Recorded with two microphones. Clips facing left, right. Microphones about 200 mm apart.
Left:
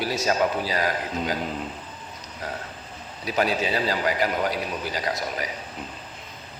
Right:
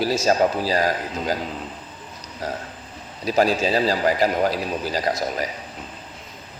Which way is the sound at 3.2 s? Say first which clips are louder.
Right 5 dB; 40° right (ahead or behind).